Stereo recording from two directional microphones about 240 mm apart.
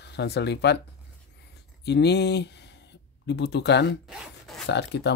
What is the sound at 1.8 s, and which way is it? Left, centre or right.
Speech, left.